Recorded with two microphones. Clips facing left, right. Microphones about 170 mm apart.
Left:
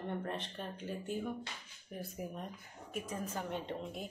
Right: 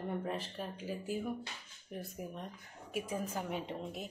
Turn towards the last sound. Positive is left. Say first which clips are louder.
# even
turn(degrees=-5)  # may be behind; listen again after turning